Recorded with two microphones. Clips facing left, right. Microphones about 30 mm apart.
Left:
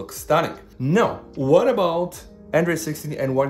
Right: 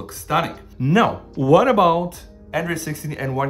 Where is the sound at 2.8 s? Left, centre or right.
Right.